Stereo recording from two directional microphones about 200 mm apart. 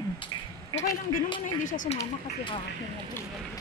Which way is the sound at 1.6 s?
40° left (ahead or behind).